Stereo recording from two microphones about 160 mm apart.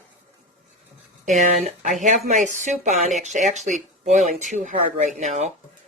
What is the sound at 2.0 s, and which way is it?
Speech, 50° right (ahead or behind).